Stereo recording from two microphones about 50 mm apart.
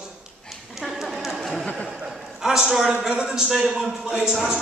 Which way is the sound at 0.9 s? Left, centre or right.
Centre.